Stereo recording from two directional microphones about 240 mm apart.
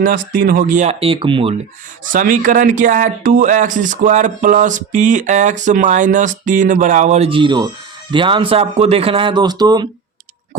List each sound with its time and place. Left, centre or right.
0.0 s speech: right
2.0 s speech: right; by 9.8 s centre